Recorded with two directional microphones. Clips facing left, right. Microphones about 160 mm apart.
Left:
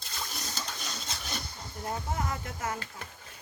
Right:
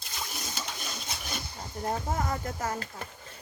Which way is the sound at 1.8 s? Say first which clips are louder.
Right 3 dB; 40° right (ahead or behind).